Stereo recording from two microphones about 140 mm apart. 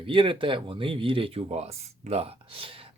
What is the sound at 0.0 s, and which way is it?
Speech, 35° right (ahead or behind).